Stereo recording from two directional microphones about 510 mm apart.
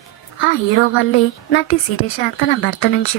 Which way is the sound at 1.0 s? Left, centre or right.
Left.